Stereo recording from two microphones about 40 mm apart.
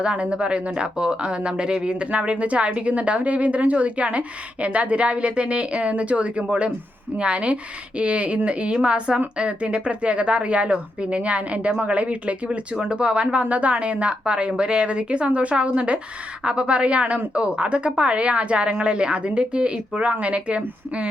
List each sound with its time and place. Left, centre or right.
0.0 s a woman's voice: right